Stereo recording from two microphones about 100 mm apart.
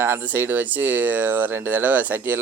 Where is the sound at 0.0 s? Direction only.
20° right (ahead or behind).